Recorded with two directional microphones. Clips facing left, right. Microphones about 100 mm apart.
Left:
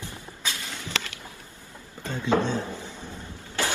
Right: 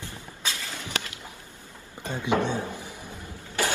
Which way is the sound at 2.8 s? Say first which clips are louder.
Left 1 dB; 15° right (ahead or behind).